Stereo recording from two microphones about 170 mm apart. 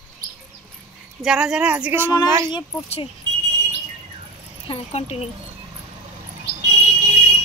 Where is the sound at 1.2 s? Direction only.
5° right (ahead or behind).